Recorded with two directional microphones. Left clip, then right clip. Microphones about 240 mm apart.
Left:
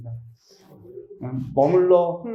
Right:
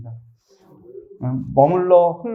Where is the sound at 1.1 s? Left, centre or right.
Right.